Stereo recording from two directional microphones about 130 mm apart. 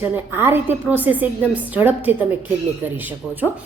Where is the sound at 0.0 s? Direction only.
15° right (ahead or behind).